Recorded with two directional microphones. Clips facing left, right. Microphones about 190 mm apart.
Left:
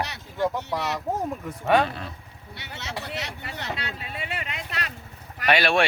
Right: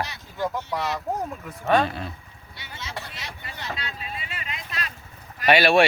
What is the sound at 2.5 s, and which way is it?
Vehicle, 65° left (ahead or behind).